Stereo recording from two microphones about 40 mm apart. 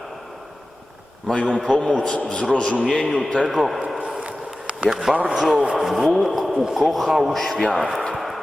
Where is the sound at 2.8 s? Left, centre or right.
Centre.